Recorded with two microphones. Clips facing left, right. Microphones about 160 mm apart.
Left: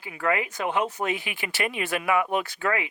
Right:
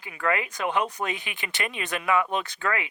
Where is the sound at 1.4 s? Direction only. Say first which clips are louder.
Left 3 dB; 20° left (ahead or behind).